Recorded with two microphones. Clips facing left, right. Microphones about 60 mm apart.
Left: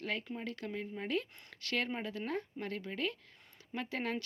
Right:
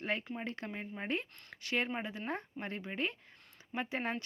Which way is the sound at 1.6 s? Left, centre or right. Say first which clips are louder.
Right 1 dB; centre.